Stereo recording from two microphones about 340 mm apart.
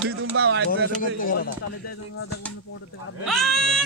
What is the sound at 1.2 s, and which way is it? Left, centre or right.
Speech, left.